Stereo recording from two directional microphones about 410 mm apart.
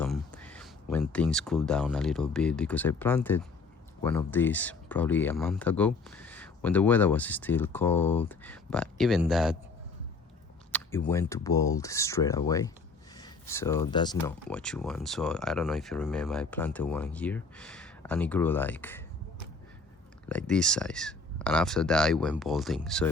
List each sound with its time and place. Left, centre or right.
0.0 s speech: centre
10.7 s speech: centre
20.2 s speech: centre